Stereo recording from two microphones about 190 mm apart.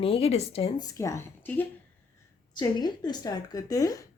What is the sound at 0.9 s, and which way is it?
Speech, 15° left (ahead or behind).